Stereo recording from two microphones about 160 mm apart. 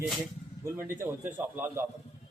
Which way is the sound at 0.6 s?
15° right (ahead or behind).